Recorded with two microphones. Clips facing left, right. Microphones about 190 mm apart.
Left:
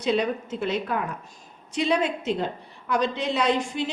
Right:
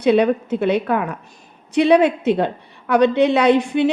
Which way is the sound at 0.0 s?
60° right (ahead or behind).